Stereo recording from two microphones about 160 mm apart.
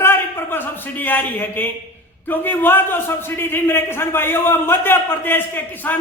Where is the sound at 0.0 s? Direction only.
15° left (ahead or behind).